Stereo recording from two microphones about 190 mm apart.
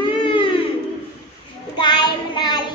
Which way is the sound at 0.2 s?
25° left (ahead or behind).